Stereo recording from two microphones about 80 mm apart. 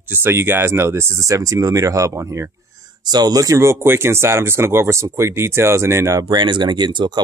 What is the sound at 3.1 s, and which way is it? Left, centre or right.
Speech, right.